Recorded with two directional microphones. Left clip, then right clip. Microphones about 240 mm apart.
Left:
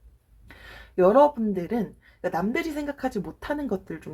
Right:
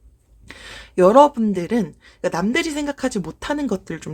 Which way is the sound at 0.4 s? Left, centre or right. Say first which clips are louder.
Right 8 dB; right.